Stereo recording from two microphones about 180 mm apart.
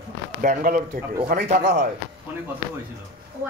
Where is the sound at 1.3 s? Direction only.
60° right (ahead or behind).